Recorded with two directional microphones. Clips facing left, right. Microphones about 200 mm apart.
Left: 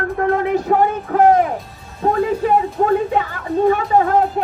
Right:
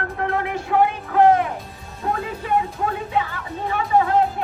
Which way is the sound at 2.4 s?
45° left (ahead or behind).